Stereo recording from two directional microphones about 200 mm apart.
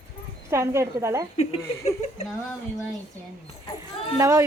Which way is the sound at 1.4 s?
30° left (ahead or behind).